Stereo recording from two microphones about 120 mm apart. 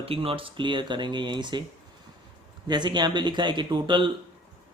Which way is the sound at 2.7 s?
40° right (ahead or behind).